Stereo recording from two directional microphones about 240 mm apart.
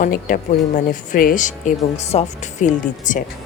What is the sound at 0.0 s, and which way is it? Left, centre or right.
A woman's voice, left.